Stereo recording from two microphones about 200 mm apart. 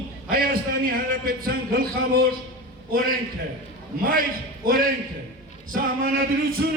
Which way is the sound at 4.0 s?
45° right (ahead or behind).